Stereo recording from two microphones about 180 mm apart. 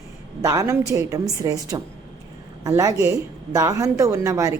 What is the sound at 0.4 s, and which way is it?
A woman's voice, 15° right (ahead or behind).